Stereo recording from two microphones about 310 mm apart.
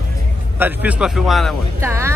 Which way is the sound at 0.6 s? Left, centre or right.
Centre.